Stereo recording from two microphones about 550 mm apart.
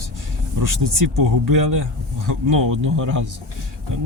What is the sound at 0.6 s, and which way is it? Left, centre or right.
Speech, right.